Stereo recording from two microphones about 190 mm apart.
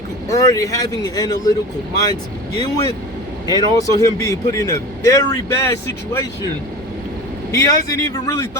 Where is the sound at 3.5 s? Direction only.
20° left (ahead or behind).